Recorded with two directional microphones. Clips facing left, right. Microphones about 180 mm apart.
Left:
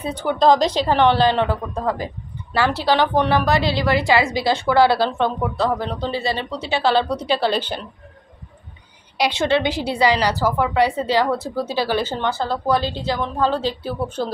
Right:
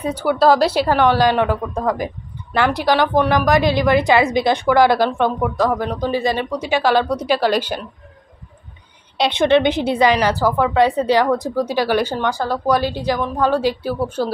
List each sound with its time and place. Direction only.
0.0 s a woman's voice: 10° right (ahead or behind)
9.2 s a woman's voice: 20° right (ahead or behind)